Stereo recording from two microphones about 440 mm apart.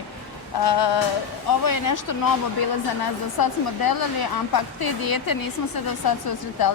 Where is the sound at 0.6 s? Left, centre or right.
Left.